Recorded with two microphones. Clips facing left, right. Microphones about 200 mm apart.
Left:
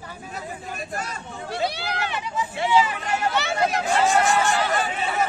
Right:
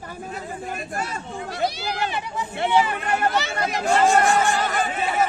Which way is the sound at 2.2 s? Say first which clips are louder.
Even; 55° right (ahead or behind).